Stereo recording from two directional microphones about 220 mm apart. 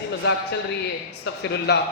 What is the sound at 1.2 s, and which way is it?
Speech, 50° left (ahead or behind).